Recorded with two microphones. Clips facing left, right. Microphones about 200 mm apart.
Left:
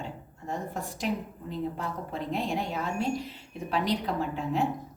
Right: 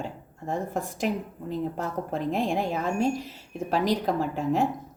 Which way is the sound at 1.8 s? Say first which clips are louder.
Right 5 dB; 50° right (ahead or behind).